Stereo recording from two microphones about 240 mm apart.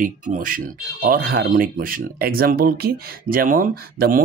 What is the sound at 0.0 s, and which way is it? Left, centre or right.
Speech, right.